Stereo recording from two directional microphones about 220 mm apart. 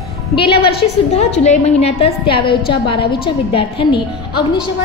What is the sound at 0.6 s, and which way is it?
Speech, 45° left (ahead or behind).